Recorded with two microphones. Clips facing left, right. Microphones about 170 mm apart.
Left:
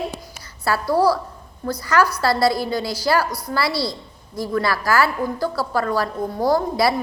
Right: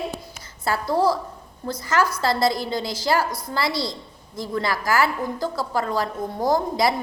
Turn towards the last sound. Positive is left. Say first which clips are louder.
# left 2 dB
turn(degrees=-20)  # may be behind; listen again after turning